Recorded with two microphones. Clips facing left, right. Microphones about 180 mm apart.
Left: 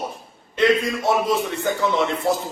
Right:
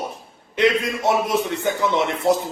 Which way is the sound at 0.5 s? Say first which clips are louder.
Left 1 dB; 20° right (ahead or behind).